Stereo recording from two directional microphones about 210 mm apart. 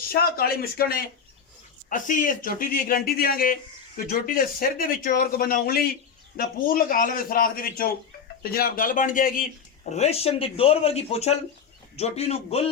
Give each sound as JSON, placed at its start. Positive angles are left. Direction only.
{"t": 0.1, "sound": "speech", "side_deg": 45}
{"t": 9.9, "sound": "speech", "side_deg": 30}